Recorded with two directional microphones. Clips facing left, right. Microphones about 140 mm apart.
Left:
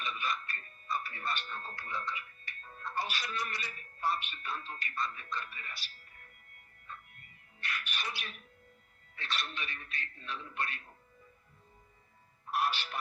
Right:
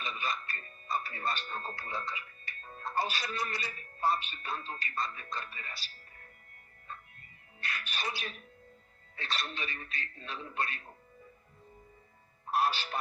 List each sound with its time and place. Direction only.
0.0 s music: 35° right (ahead or behind)
3.3 s speech: 30° right (ahead or behind)
7.6 s speech: 35° right (ahead or behind)
12.5 s a man's voice: 35° right (ahead or behind)